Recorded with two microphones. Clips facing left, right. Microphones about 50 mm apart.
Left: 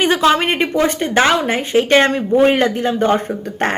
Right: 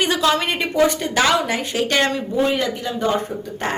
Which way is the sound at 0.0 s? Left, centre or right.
Left.